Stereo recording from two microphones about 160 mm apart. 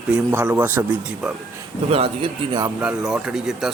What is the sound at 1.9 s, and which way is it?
Speech, 35° right (ahead or behind).